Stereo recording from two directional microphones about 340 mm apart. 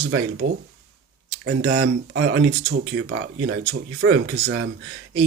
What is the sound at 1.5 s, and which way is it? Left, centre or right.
Speech, right.